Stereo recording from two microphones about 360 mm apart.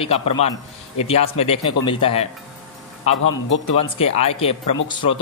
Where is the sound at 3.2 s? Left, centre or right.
Left.